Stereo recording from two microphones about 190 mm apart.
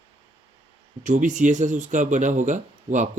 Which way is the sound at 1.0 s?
40° right (ahead or behind).